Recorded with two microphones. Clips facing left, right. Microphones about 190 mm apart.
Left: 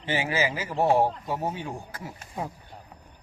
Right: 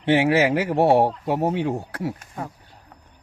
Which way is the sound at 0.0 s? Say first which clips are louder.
Right 9 dB; 70° right (ahead or behind).